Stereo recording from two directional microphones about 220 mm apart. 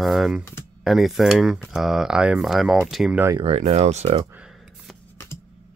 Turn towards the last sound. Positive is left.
turn(degrees=-5)  # may be behind; listen again after turning